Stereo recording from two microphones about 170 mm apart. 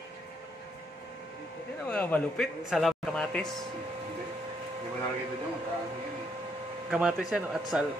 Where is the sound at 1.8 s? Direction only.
10° left (ahead or behind).